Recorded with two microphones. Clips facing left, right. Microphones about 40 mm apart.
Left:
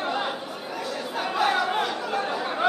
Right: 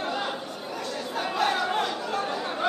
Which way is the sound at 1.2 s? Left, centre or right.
Centre.